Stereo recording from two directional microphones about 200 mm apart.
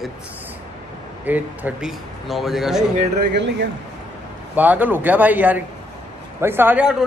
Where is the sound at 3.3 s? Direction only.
60° right (ahead or behind).